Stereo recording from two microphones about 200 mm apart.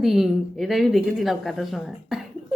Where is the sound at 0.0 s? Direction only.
Centre (ahead or behind).